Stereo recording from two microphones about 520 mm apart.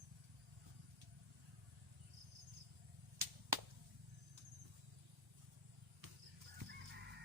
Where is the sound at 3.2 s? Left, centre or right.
Right.